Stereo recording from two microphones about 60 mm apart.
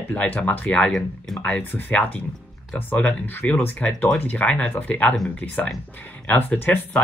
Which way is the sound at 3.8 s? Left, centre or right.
Centre.